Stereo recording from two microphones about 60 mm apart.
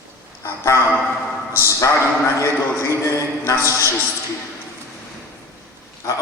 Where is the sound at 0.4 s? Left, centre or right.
Left.